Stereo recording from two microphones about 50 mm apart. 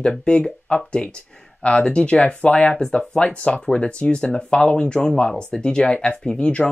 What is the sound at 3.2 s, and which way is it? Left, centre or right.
Speech, left.